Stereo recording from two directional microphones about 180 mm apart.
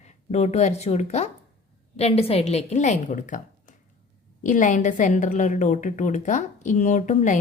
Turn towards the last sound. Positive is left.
turn(degrees=45)  # may be behind; listen again after turning